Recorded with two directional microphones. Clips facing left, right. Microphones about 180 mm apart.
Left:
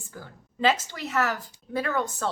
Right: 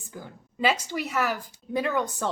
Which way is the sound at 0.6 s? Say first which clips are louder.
Left 1 dB; 10° right (ahead or behind).